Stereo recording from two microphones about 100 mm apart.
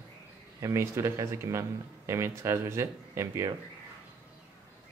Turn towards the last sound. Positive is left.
turn(degrees=-25)  # may be behind; listen again after turning